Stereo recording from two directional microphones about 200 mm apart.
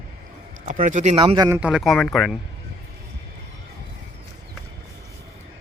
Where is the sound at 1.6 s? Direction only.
Centre (ahead or behind).